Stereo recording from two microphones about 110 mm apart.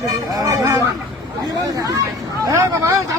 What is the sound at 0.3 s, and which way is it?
Vehicle, 30° right (ahead or behind).